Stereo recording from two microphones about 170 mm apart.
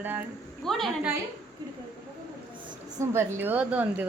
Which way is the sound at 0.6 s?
Centre (ahead or behind).